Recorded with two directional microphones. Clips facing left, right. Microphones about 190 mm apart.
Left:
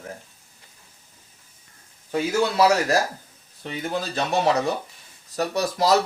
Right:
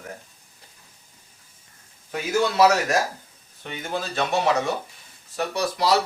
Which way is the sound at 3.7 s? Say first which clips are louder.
Left 2 dB; 35° left (ahead or behind).